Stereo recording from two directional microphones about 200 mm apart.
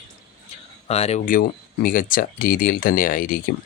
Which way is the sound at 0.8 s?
30° left (ahead or behind).